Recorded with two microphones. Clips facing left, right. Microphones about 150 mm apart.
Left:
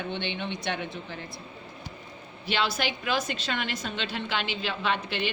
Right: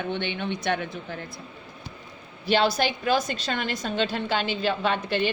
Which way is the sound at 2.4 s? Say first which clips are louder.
Right 6 dB; 40° right (ahead or behind).